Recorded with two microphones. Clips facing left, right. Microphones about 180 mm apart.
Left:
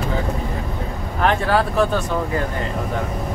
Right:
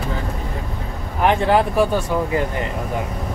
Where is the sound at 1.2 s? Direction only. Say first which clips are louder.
Right 2 dB; 20° right (ahead or behind).